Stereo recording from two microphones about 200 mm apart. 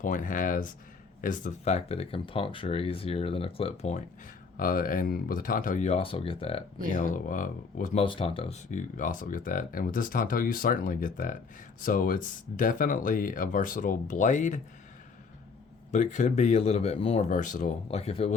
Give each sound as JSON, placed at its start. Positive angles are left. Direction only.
{"t": 0.0, "sound": "speech", "side_deg": 40}
{"t": 4.5, "sound": "speech", "side_deg": 45}
{"t": 6.9, "sound": "speech", "side_deg": 40}
{"t": 8.0, "sound": "speech", "side_deg": 25}
{"t": 8.7, "sound": "speech", "side_deg": 40}
{"t": 15.9, "sound": "speech", "side_deg": 40}